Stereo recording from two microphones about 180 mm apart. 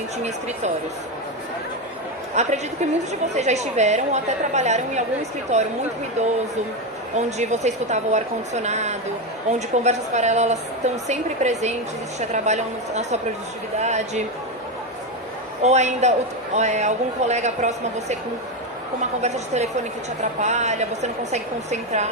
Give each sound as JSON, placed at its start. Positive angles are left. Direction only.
{"t": 0.2, "sound": "a woman's voice", "side_deg": -40}
{"t": 2.3, "sound": "a woman's voice", "side_deg": -40}
{"t": 15.6, "sound": "a woman's voice", "side_deg": -40}
{"t": 20.2, "sound": "a woman's voice", "side_deg": -40}